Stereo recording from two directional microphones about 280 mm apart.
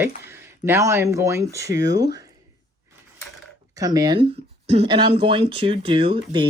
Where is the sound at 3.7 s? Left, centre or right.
Centre.